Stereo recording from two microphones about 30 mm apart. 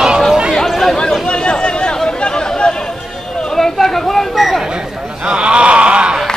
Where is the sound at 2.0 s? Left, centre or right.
Left.